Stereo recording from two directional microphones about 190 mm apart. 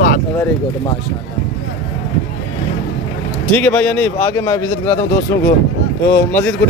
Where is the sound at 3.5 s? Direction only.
10° left (ahead or behind).